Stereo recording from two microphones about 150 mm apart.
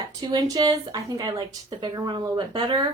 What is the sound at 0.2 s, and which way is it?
A woman's voice, 25° right (ahead or behind).